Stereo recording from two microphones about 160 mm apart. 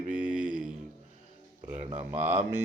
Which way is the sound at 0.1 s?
55° right (ahead or behind).